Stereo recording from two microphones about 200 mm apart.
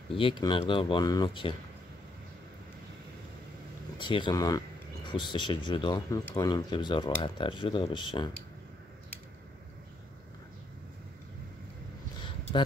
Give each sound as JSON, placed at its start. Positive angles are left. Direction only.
{"t": 0.1, "sound": "speech", "side_deg": 25}
{"t": 4.0, "sound": "speech", "side_deg": 25}